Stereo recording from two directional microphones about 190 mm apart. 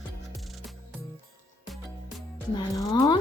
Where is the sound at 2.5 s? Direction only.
20° left (ahead or behind).